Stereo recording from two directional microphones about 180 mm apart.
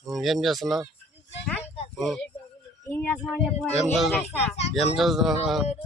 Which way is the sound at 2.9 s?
10° left (ahead or behind).